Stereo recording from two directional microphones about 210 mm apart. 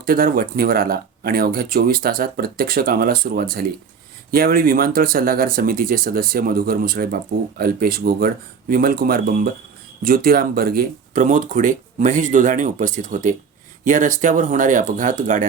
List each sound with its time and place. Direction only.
0.0 s speech: 45° right (ahead or behind)